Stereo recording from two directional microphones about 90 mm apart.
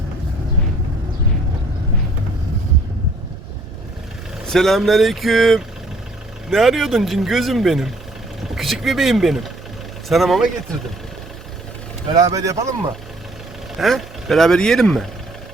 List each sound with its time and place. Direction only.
4.4 s speech: 5° left (ahead or behind)
12.1 s speech: 40° right (ahead or behind)
13.7 s speech: centre (ahead or behind)